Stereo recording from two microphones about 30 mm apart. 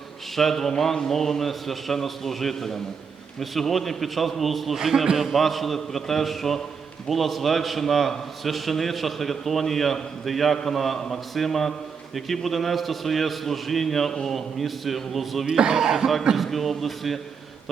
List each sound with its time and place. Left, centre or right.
0.3 s a man's voice: centre
4.7 s a man's voice: centre
5.1 s a man's voice: centre
15.4 s speech: right
15.8 s a man's voice: centre
16.4 s a man's voice: centre